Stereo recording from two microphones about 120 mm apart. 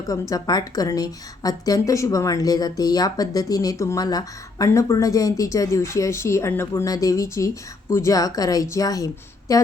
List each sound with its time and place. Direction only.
0.1 s a woman's voice: 30° left (ahead or behind)